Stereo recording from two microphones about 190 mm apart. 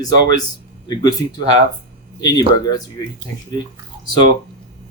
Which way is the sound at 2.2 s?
20° left (ahead or behind).